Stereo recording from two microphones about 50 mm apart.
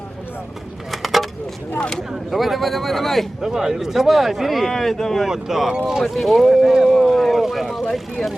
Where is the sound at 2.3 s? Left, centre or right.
Centre.